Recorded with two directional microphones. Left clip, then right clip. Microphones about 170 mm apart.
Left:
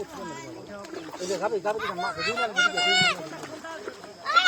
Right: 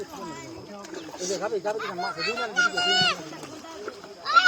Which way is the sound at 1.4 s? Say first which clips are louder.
Left 2 dB; 45° right (ahead or behind).